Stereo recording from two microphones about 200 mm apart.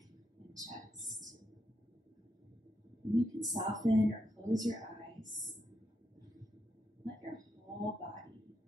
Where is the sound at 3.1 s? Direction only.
20° right (ahead or behind).